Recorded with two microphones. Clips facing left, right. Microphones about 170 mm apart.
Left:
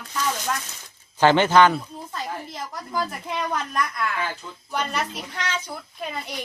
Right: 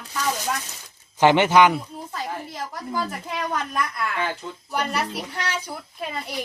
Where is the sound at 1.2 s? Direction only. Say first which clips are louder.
Even; 15° right (ahead or behind).